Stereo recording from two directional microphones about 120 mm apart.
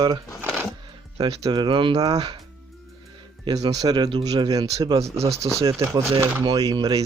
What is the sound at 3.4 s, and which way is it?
Speech, 35° right (ahead or behind).